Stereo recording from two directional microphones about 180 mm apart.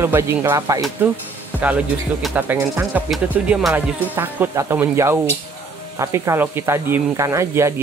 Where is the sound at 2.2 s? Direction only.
10° right (ahead or behind).